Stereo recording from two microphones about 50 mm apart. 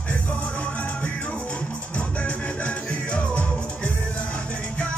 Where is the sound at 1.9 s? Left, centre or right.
Left.